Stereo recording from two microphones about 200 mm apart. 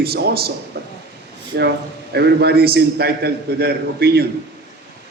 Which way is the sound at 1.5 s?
55° right (ahead or behind).